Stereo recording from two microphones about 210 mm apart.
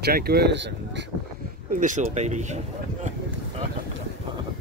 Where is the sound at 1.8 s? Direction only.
35° right (ahead or behind).